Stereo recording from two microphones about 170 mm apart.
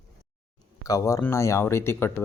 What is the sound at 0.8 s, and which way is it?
Speech, 20° left (ahead or behind).